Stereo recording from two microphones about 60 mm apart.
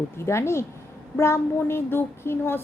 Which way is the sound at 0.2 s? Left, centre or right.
Left.